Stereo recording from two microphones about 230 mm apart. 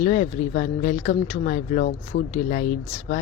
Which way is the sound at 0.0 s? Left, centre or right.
Left.